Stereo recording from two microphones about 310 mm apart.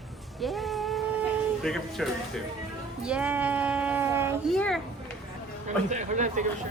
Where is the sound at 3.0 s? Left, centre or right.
Centre.